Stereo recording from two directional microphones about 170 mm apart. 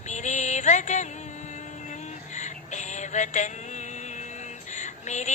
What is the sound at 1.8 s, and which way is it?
Synthetic singing, 45° left (ahead or behind).